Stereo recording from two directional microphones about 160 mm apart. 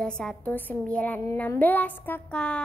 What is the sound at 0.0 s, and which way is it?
A woman's voice, 5° left (ahead or behind).